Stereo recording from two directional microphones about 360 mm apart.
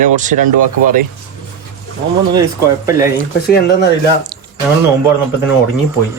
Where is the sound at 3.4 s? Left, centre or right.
Left.